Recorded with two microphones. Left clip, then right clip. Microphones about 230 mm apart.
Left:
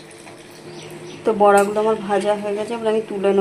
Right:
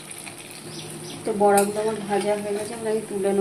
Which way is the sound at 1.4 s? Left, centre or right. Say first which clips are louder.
Left 5 dB; centre.